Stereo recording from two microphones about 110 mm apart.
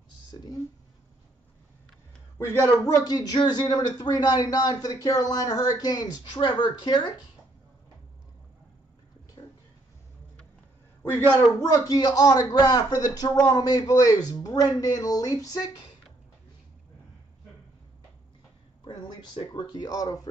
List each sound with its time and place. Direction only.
0.3 s speech: 40° left (ahead or behind)
2.3 s speech: 30° left (ahead or behind)
9.4 s a sound: 40° left (ahead or behind)
11.0 s a man's voice: 20° left (ahead or behind)
11.6 s speech: 35° left (ahead or behind)
18.9 s speech: 45° left (ahead or behind)